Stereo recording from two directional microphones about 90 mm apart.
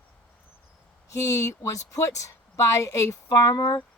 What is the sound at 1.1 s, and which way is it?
Speech, 35° left (ahead or behind).